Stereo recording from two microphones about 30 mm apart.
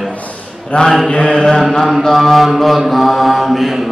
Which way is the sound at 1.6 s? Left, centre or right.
Centre.